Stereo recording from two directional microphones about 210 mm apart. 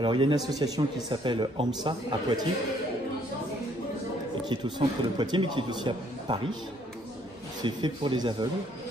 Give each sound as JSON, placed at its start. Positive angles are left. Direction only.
{"t": 0.0, "sound": "a man's voice", "side_deg": -20}
{"t": 4.5, "sound": "a man's voice", "side_deg": -20}
{"t": 7.6, "sound": "a man's voice", "side_deg": -25}